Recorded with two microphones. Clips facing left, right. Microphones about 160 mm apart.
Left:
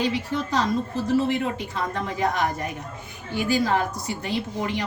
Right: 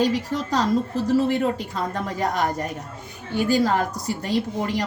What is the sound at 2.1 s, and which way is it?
A woman's voice, 40° right (ahead or behind).